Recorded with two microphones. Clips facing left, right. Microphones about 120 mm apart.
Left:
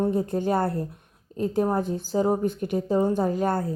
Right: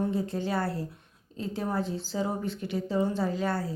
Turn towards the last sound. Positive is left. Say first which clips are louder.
# left 5 dB
turn(degrees=50)  # may be behind; listen again after turning